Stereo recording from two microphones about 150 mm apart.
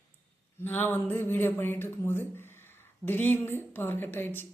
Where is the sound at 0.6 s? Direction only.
15° left (ahead or behind).